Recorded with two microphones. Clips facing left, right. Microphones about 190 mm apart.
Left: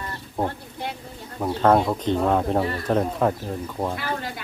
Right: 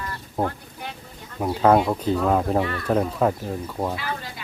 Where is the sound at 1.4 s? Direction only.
5° right (ahead or behind).